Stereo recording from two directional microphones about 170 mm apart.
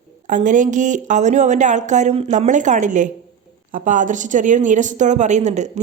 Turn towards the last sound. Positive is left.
turn(degrees=-45)  # may be behind; listen again after turning